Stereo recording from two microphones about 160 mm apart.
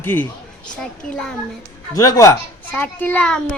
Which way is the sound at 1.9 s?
20° left (ahead or behind).